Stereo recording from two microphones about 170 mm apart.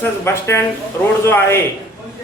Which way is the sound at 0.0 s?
15° left (ahead or behind).